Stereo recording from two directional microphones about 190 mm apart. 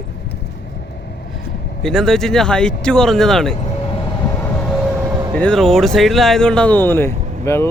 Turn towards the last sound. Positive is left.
turn(degrees=15)  # may be behind; listen again after turning